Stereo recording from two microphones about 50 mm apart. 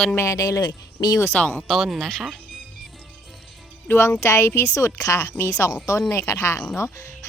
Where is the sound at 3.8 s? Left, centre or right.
Left.